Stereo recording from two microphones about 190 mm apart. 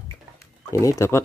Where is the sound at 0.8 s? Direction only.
15° left (ahead or behind).